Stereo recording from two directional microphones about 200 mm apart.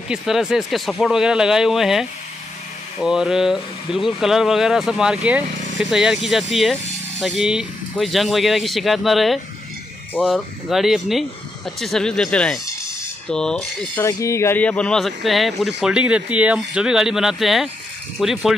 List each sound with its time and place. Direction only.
0.1 s speech: 5° right (ahead or behind)
14.0 s speech: 15° left (ahead or behind); by 18.5 s centre (ahead or behind)